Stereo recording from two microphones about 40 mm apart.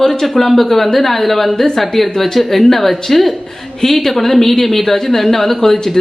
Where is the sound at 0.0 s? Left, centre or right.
Centre.